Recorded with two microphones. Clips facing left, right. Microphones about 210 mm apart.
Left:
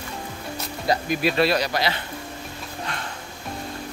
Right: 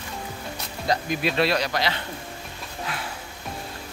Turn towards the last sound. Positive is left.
turn(degrees=-5)  # may be behind; listen again after turning